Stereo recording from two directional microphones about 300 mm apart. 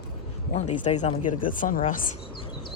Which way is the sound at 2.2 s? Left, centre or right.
Centre.